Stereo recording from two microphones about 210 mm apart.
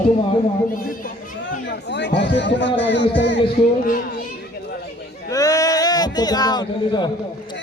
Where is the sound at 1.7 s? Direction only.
55° left (ahead or behind).